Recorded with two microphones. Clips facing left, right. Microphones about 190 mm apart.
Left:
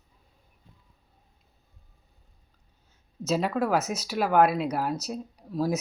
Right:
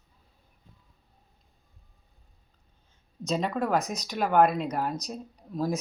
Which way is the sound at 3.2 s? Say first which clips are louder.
Left 2 dB; 5° left (ahead or behind).